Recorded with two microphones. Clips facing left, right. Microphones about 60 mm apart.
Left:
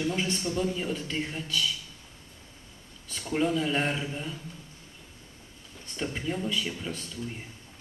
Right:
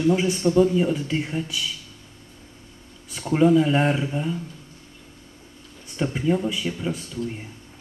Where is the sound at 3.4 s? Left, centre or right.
Centre.